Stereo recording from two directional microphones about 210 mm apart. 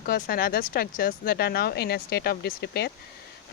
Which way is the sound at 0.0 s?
45° left (ahead or behind).